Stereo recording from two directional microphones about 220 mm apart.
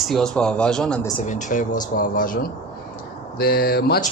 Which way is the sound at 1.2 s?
35° left (ahead or behind).